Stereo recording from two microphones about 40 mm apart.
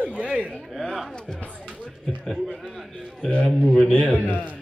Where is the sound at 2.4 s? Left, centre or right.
Centre.